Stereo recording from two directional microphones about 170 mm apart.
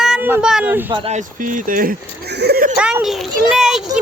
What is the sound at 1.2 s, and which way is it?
Speech, 50° right (ahead or behind).